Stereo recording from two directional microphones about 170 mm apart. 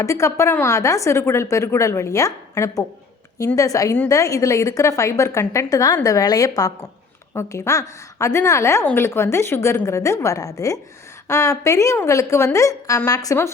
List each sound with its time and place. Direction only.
0.0 s a woman's voice: 15° left (ahead or behind)